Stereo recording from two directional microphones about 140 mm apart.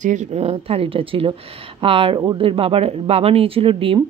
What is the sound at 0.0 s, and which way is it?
A woman's voice, 60° right (ahead or behind).